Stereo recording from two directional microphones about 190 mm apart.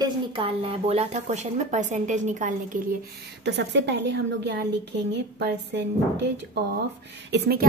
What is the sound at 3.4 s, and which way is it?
A woman's voice, 65° right (ahead or behind).